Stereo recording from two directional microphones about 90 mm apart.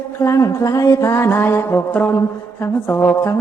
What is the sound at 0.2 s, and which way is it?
Speech, 35° left (ahead or behind).